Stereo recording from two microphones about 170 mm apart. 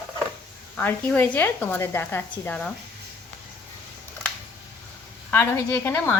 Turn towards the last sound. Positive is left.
turn(degrees=10)  # may be behind; listen again after turning